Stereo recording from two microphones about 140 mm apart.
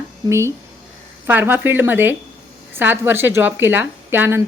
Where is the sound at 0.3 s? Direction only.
20° right (ahead or behind).